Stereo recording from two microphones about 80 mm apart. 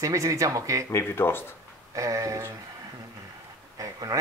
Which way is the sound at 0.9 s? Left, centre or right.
Left.